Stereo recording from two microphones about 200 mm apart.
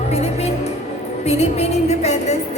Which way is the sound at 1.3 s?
35° left (ahead or behind).